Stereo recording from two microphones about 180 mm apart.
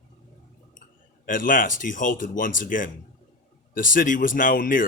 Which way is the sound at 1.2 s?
50° left (ahead or behind).